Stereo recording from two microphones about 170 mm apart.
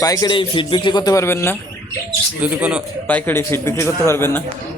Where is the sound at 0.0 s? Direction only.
20° left (ahead or behind).